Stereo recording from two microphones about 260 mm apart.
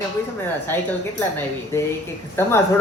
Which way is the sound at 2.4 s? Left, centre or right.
Centre.